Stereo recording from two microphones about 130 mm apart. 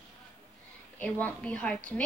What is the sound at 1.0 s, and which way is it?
A woman's voice, 10° left (ahead or behind).